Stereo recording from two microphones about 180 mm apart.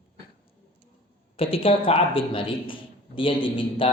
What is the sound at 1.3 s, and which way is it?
A man's voice, 30° left (ahead or behind).